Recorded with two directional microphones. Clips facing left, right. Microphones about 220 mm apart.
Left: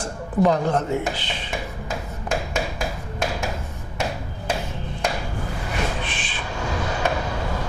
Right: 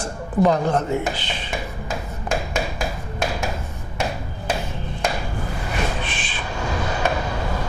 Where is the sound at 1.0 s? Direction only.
10° right (ahead or behind).